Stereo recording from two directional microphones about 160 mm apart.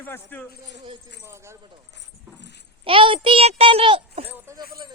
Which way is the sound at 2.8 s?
35° right (ahead or behind).